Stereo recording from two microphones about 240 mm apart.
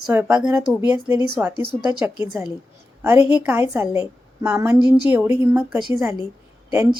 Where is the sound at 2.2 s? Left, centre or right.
Centre.